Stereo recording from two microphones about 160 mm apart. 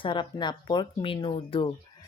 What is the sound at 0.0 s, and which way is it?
Speech, 30° left (ahead or behind).